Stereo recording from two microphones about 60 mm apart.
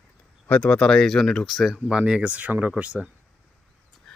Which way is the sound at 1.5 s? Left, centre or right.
Centre.